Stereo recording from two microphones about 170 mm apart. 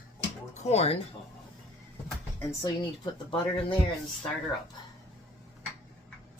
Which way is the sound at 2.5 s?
25° left (ahead or behind).